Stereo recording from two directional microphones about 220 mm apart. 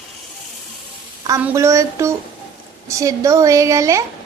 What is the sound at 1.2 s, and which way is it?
A woman's voice, 15° right (ahead or behind).